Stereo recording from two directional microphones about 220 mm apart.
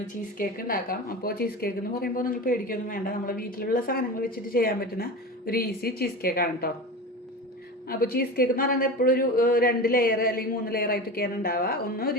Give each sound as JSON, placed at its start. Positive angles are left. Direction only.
{"t": 0.3, "sound": "a woman's voice", "side_deg": 40}
{"t": 7.9, "sound": "a woman's voice", "side_deg": 45}